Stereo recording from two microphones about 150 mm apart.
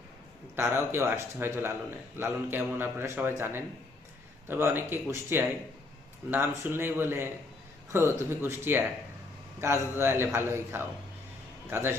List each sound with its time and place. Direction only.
0.5 s a man's voice: 15° right (ahead or behind)